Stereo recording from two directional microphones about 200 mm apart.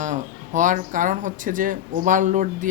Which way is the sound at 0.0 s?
40° right (ahead or behind).